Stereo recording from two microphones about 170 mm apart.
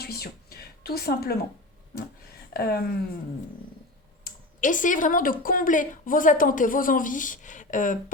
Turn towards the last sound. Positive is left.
turn(degrees=50)  # may be behind; listen again after turning